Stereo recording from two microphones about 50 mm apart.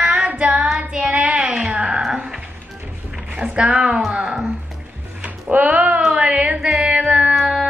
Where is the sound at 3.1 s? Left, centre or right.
Centre.